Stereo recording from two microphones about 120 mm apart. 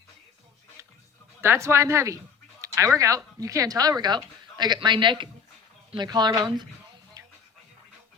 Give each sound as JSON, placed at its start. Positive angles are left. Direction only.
{"t": 1.4, "sound": "speech", "side_deg": -20}